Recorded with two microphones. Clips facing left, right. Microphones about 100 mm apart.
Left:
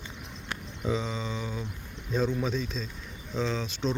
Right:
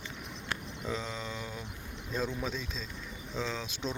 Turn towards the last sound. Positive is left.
turn(degrees=-5)  # may be behind; listen again after turning